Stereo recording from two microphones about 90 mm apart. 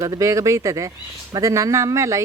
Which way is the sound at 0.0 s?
35° right (ahead or behind).